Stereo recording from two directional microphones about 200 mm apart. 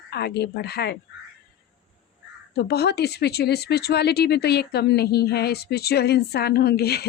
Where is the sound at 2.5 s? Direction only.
55° left (ahead or behind).